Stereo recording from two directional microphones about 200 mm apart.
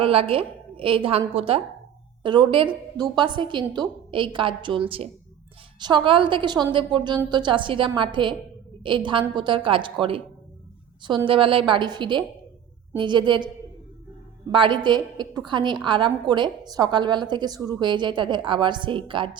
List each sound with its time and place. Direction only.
0.0 s a woman's voice: 25° right (ahead or behind)
14.5 s a woman's voice: 25° right (ahead or behind)